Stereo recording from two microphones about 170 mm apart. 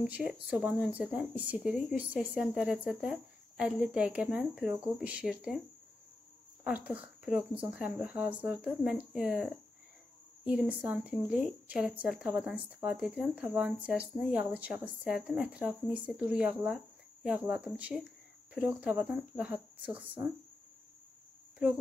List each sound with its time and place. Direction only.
0.0 s speech: centre (ahead or behind)
6.6 s a woman's voice: 5° right (ahead or behind)